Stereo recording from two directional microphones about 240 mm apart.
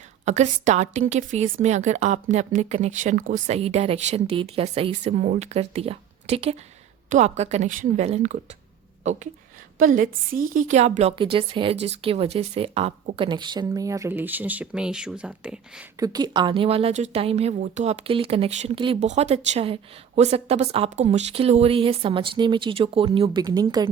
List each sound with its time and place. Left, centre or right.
0.3 s speech: right
9.7 s speech: right; by 15.6 s centre
16.0 s speech: centre